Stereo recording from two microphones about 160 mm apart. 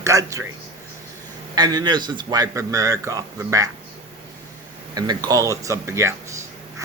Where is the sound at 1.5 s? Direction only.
25° right (ahead or behind).